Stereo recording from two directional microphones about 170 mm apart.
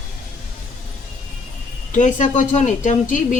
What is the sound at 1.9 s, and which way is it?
A woman's voice, 45° left (ahead or behind).